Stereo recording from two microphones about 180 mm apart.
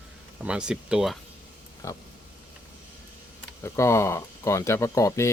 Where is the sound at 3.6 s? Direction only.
15° left (ahead or behind).